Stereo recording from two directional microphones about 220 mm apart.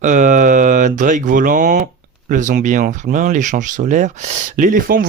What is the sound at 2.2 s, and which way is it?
Speech, 35° right (ahead or behind).